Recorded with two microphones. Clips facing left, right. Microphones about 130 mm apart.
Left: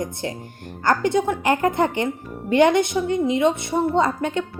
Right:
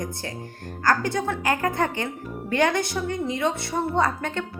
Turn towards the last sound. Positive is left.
turn(degrees=15)  # may be behind; listen again after turning